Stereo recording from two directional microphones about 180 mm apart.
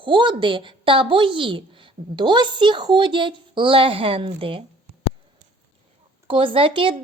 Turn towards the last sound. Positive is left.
turn(degrees=-30)  # may be behind; listen again after turning